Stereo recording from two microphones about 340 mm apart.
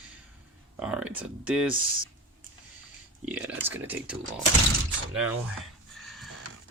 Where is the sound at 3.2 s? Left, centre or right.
Centre.